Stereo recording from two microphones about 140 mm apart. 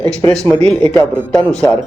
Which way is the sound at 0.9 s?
20° left (ahead or behind).